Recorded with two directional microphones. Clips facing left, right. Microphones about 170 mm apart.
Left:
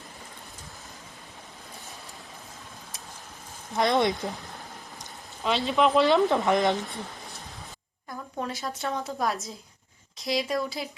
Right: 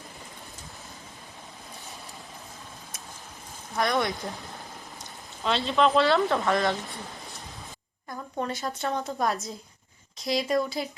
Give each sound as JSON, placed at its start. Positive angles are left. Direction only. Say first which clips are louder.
{"t": 3.8, "sound": "speech", "louder": "left 3 dB", "side_deg": 25}
{"t": 5.4, "sound": "speech", "louder": "even", "side_deg": 15}
{"t": 8.1, "sound": "a woman's voice", "louder": "right 2 dB", "side_deg": 0}